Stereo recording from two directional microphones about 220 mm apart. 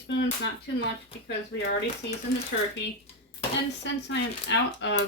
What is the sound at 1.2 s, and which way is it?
Speech, 50° left (ahead or behind).